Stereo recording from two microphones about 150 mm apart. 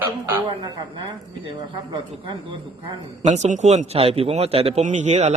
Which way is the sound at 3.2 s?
50° right (ahead or behind).